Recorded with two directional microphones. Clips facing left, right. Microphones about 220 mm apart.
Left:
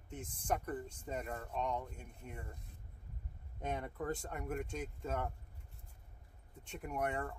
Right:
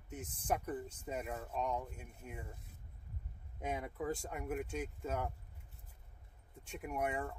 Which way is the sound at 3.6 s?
5° right (ahead or behind).